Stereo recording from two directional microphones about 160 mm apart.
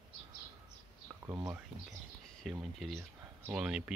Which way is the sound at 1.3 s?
25° right (ahead or behind).